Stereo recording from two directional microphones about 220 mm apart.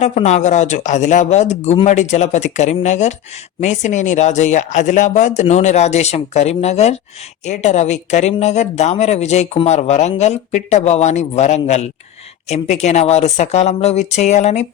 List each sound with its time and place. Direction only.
0.0 s speech: 30° left (ahead or behind)